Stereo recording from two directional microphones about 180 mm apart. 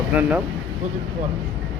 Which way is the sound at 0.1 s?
10° right (ahead or behind).